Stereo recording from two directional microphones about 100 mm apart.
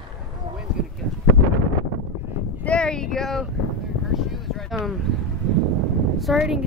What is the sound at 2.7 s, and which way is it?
Speech, 10° left (ahead or behind).